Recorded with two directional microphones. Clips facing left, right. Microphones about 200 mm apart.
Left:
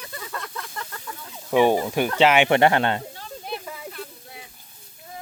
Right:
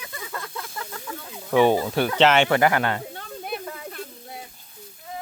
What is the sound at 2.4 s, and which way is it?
Speech, 25° left (ahead or behind).